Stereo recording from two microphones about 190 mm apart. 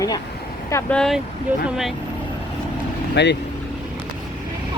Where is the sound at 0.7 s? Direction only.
10° left (ahead or behind).